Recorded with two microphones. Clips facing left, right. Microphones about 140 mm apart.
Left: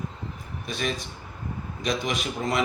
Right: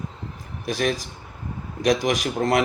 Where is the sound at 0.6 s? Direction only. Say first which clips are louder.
Right 6 dB; 90° right.